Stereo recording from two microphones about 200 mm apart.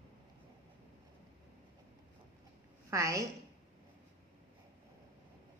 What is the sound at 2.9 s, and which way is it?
Speech, 15° right (ahead or behind).